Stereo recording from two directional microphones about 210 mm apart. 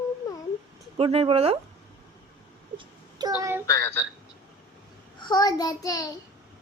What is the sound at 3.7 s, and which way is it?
Speech, 15° left (ahead or behind).